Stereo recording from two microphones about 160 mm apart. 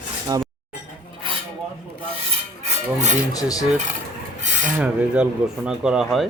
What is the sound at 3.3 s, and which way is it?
Cutlery, 20° left (ahead or behind).